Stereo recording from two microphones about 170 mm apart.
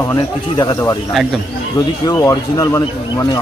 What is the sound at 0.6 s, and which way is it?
Speech, 20° left (ahead or behind).